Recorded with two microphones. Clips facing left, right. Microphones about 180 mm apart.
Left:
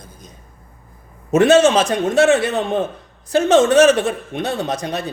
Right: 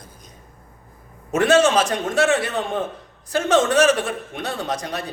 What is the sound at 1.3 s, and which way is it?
A man's voice, 20° left (ahead or behind).